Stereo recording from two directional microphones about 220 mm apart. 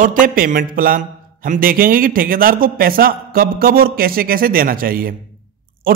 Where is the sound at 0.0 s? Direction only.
35° right (ahead or behind).